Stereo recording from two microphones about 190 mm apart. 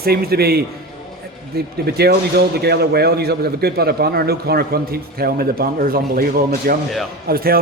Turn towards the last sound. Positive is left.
turn(degrees=-50)  # may be behind; listen again after turning